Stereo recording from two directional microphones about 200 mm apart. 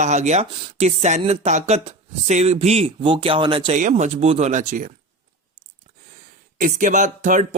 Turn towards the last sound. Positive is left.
turn(degrees=-40)  # may be behind; listen again after turning